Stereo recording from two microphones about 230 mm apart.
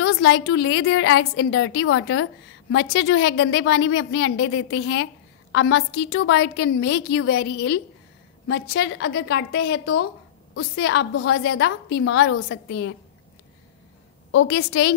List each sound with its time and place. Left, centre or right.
0.1 s a woman's voice: left
14.3 s a woman's voice: left